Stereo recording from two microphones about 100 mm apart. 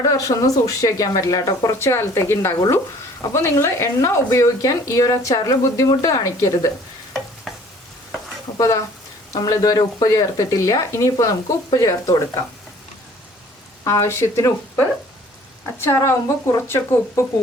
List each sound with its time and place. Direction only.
0.0 s speech: 35° left (ahead or behind)
7.5 s stir: centre (ahead or behind)
8.5 s speech: 30° left (ahead or behind)
13.8 s speech: 30° left (ahead or behind)